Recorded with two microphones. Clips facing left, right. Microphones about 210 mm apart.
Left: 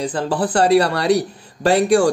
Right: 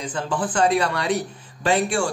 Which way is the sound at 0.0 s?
35° left (ahead or behind).